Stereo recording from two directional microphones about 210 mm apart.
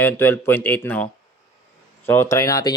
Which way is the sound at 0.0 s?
10° left (ahead or behind).